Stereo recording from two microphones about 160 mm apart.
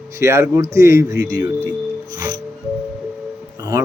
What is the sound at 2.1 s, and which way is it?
Music, 25° right (ahead or behind).